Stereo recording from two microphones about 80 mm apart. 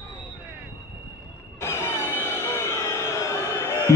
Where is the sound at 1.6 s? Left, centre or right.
Left.